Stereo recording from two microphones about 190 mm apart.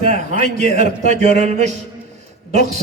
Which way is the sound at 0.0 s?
40° right (ahead or behind).